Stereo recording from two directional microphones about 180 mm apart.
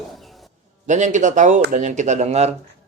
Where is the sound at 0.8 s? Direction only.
40° right (ahead or behind).